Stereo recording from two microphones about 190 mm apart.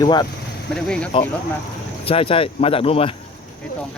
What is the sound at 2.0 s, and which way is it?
Speech, 30° left (ahead or behind).